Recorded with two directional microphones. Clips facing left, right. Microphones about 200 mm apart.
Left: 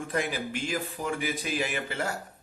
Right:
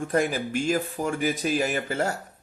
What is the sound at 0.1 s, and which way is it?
Speech, 45° right (ahead or behind).